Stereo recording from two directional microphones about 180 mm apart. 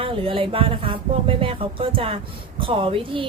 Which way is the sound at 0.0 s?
30° right (ahead or behind).